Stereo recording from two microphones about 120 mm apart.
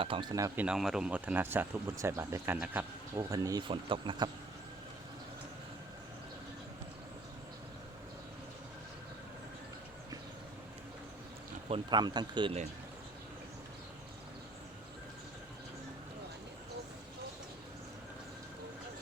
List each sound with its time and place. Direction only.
0.0 s speech: 45° right (ahead or behind)
0.5 s speech: 15° right (ahead or behind); by 3.6 s 30° right (ahead or behind)
3.6 s speech: 45° right (ahead or behind)
11.7 s speech: 40° right (ahead or behind)